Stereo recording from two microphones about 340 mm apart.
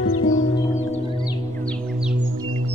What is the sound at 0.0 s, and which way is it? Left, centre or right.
Music, left.